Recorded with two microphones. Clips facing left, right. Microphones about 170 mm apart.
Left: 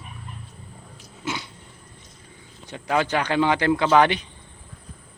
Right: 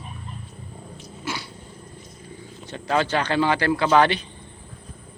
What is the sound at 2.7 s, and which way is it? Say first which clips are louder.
Speech: even; 15° left (ahead or behind).